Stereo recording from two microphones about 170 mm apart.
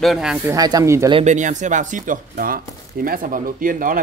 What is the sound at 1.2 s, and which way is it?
Speech, 45° right (ahead or behind).